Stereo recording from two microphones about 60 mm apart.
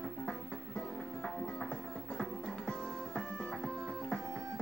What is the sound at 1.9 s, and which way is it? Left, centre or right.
Music, centre.